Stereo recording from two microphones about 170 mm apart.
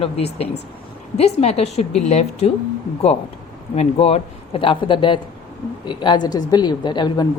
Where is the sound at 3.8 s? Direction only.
35° left (ahead or behind).